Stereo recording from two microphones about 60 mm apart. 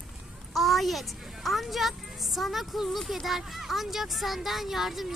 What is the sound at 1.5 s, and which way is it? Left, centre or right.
Speech, centre.